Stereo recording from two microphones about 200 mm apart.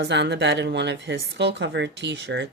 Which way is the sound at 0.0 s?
60° right (ahead or behind).